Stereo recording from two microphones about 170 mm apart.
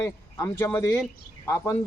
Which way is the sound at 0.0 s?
15° left (ahead or behind).